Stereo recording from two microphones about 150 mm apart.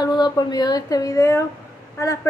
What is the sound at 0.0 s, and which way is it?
A woman's voice, 25° left (ahead or behind).